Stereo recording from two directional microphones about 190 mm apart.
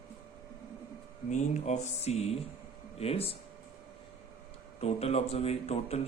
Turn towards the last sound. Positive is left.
turn(degrees=35)  # may be behind; listen again after turning